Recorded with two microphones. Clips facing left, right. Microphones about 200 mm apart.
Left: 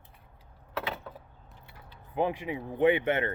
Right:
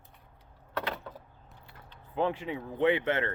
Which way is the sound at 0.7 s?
5° left (ahead or behind).